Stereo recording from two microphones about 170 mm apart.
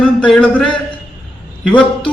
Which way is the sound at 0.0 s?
5° left (ahead or behind).